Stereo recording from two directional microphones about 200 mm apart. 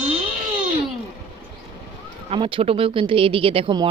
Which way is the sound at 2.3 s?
25° right (ahead or behind).